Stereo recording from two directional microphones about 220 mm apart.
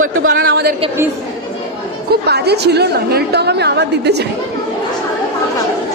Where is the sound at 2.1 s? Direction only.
50° right (ahead or behind).